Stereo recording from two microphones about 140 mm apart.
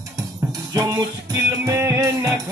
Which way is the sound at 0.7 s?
25° right (ahead or behind).